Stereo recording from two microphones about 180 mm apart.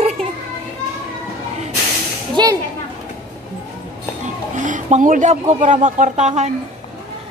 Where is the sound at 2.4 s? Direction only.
25° right (ahead or behind).